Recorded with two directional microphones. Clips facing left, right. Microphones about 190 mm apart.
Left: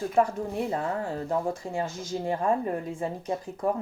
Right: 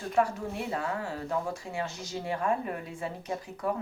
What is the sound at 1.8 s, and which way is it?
Speech, 50° left (ahead or behind).